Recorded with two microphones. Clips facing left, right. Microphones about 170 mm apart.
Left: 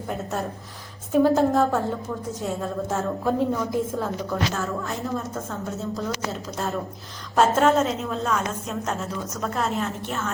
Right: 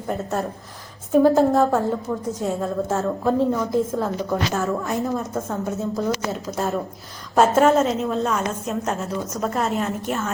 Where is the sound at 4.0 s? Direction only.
15° right (ahead or behind).